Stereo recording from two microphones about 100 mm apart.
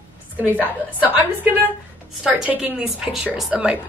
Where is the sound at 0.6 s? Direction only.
20° right (ahead or behind).